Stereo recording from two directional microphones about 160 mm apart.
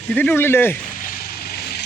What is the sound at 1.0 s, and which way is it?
Vehicle, 60° left (ahead or behind).